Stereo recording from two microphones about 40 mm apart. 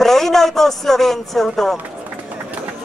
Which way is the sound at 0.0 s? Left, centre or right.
Centre.